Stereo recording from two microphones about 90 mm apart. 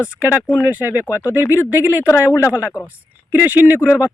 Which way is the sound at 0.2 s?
15° right (ahead or behind).